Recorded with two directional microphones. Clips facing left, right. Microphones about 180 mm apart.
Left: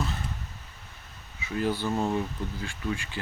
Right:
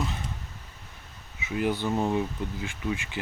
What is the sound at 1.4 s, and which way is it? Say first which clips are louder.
Speech: right 1 dB; 15° right (ahead or behind).